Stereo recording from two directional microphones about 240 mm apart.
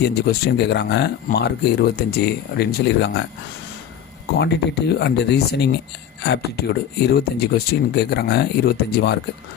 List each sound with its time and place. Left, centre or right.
0.0 s speech: left
4.4 s speech: left